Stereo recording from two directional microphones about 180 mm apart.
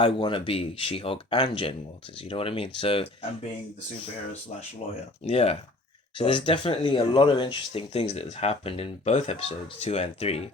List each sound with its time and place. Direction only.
0.0 s speech: 25° left (ahead or behind)
5.2 s speech: 35° left (ahead or behind)